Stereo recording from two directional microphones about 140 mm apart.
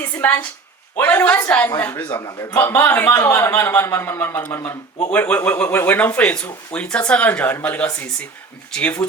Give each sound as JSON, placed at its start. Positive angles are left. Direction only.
{"t": 0.0, "sound": "a sound", "side_deg": 15}
{"t": 0.9, "sound": "a man's voice", "side_deg": 15}
{"t": 2.0, "sound": "a man's voice", "side_deg": 25}